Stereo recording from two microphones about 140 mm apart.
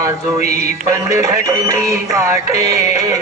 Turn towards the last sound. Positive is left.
turn(degrees=-25)  # may be behind; listen again after turning